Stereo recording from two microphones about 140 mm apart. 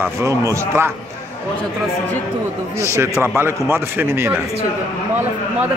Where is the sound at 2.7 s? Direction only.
20° right (ahead or behind).